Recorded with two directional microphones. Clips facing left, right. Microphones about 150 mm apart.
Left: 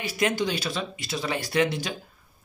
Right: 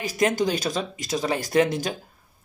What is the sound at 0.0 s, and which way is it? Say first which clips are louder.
Speech: right 3 dB; 45° right (ahead or behind).